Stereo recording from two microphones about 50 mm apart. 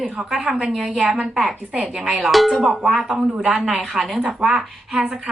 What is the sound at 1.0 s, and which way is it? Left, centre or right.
Speech, centre.